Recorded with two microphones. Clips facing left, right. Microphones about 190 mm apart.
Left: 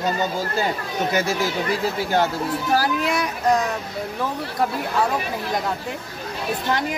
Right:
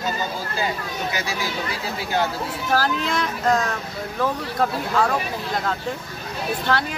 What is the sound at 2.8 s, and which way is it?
Speech, 10° left (ahead or behind).